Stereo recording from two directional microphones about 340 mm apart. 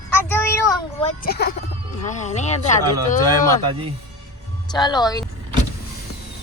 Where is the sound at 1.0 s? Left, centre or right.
Left.